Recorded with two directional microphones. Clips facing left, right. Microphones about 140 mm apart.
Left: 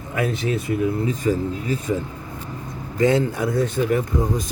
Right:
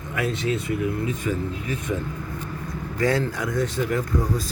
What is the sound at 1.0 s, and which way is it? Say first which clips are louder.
Speech: left 5 dB; 35° left (ahead or behind).